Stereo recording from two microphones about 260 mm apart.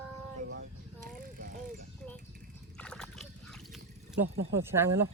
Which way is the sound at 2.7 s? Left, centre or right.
Centre.